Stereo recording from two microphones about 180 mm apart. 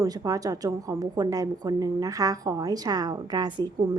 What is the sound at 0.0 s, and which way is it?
A woman's voice, 20° right (ahead or behind).